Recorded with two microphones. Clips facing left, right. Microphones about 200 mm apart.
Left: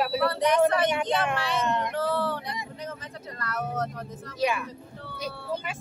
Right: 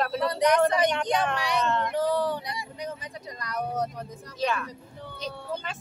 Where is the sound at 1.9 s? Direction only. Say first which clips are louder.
Right 2 dB; 15° right (ahead or behind).